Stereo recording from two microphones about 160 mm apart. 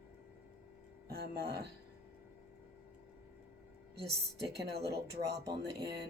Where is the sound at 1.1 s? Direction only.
85° right.